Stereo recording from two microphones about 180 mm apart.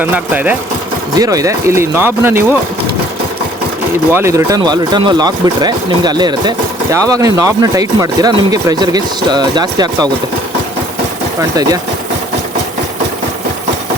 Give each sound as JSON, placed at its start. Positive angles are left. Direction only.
{"t": 0.0, "sound": "speech", "side_deg": -10}
{"t": 4.1, "sound": "speech", "side_deg": -15}